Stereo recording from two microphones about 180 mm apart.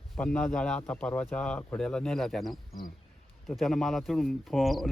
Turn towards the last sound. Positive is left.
turn(degrees=0)  # may be behind; listen again after turning